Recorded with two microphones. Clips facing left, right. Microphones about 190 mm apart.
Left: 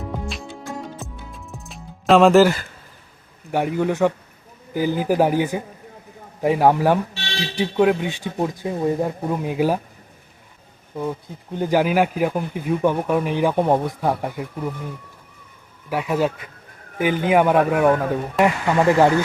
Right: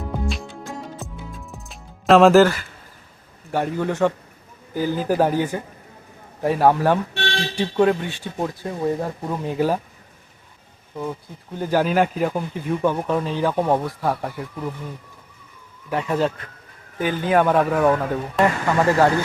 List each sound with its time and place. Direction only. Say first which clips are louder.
0.3 s music: right 1 dB; centre (ahead or behind)
3.5 s a man's voice: left 2 dB; 15° left (ahead or behind)
7.1 s speech: right 4 dB; 55° right (ahead or behind)
7.5 s a man's voice: left 1 dB; 10° left (ahead or behind)
11.5 s a man's voice: left 1 dB; 15° left (ahead or behind)
15.9 s a man's voice: left 1 dB; 5° left (ahead or behind)